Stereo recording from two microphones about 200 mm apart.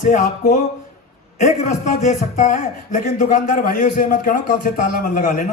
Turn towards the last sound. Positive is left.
turn(degrees=40)  # may be behind; listen again after turning